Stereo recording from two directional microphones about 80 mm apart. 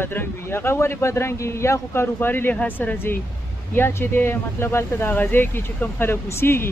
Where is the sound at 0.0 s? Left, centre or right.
Left.